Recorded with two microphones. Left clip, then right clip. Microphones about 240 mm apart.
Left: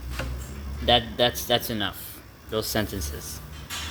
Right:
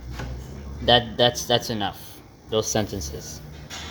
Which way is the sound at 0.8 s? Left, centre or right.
Centre.